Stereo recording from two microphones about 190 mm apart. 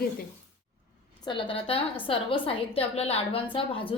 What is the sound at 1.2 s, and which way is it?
A woman's voice, 25° left (ahead or behind).